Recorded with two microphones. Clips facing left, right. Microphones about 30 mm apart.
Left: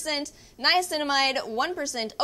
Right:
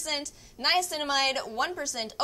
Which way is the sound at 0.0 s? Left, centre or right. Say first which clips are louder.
Left 3 dB; centre.